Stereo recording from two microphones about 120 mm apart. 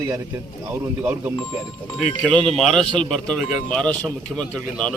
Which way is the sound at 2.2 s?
5° left (ahead or behind).